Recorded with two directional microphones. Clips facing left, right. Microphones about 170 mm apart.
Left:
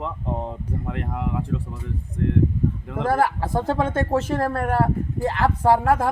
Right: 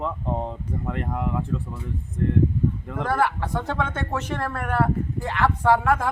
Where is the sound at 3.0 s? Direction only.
35° left (ahead or behind).